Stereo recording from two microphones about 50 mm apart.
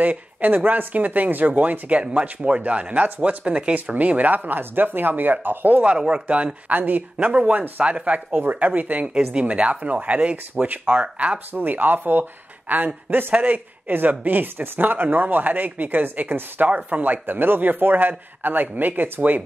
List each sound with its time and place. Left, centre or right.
0.0 s speech: right
5.9 s speech: centre
6.2 s speech: right
8.3 s speech: right
16.6 s speech: right